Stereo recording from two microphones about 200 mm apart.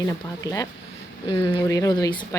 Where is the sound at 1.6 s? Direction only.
15° left (ahead or behind).